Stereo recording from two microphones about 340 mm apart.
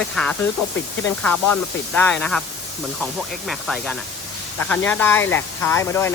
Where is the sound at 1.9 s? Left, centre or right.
Centre.